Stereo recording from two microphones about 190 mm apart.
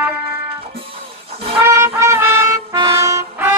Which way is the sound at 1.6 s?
15° right (ahead or behind).